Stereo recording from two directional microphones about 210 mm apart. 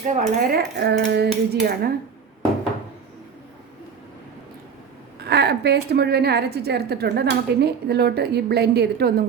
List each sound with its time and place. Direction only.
0.1 s a woman's voice: 40° right (ahead or behind)
5.2 s a woman's voice: 50° right (ahead or behind)